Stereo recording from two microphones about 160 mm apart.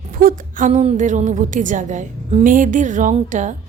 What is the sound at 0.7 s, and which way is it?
A woman's voice, 45° right (ahead or behind).